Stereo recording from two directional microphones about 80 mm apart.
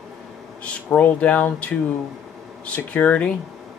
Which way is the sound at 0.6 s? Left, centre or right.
Centre.